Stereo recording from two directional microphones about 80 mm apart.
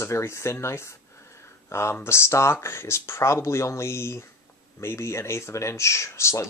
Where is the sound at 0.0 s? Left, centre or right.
Left.